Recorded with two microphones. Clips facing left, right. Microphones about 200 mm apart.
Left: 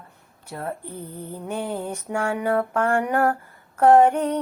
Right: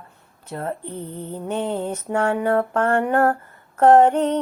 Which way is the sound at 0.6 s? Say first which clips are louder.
Right 3 dB; 25° right (ahead or behind).